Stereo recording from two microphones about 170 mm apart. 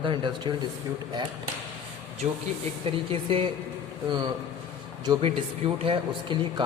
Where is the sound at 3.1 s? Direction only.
30° right (ahead or behind).